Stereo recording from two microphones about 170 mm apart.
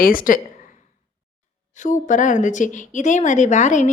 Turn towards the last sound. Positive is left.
turn(degrees=45)  # may be behind; listen again after turning